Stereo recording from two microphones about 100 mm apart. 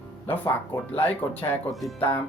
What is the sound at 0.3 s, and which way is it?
Speech, 20° left (ahead or behind).